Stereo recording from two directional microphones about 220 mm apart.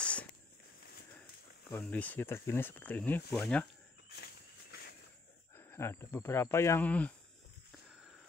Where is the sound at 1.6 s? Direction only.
10° left (ahead or behind).